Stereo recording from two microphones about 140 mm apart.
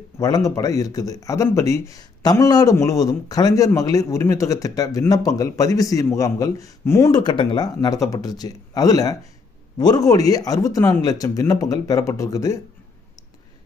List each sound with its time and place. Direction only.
0.2 s speech: 25° left (ahead or behind)